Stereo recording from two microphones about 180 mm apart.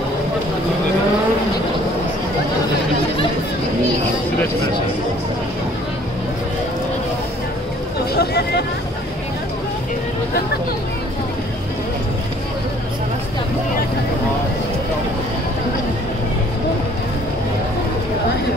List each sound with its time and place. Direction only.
8.1 s vehicle: 65° left (ahead or behind)